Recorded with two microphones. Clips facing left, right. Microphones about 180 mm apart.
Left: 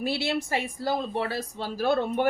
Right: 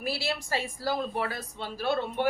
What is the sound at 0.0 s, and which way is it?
A woman's voice, 20° left (ahead or behind).